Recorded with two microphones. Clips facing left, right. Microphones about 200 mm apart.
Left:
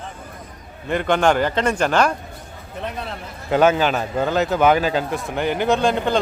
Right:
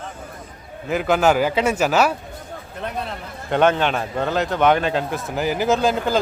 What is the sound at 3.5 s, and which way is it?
A man's voice, 5° left (ahead or behind).